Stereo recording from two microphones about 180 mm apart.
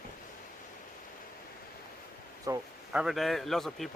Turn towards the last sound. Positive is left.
turn(degrees=0)  # may be behind; listen again after turning